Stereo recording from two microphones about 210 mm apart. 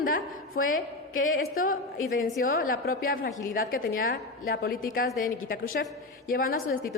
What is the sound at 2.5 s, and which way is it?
A woman's voice, 45° left (ahead or behind).